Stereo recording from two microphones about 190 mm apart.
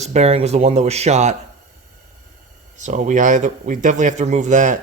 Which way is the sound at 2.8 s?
40° right (ahead or behind).